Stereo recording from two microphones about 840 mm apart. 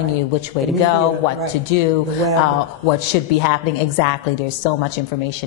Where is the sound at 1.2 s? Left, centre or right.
Left.